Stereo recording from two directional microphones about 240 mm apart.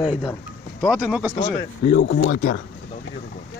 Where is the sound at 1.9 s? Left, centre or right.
Left.